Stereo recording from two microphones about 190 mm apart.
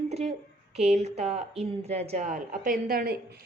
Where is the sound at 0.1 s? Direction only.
35° right (ahead or behind).